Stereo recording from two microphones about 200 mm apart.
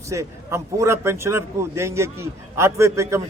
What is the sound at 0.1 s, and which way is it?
A man's voice, 15° right (ahead or behind).